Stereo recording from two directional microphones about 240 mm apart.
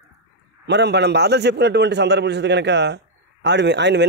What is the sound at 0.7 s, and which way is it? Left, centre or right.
Speech, right.